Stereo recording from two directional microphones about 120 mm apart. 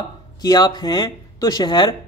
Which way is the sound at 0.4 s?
35° left (ahead or behind).